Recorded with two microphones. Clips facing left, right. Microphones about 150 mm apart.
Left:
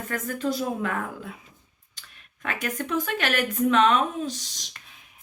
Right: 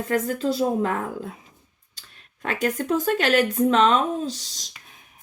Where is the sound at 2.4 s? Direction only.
45° right (ahead or behind).